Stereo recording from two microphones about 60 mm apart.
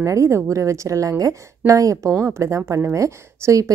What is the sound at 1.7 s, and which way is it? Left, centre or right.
A woman's voice, right.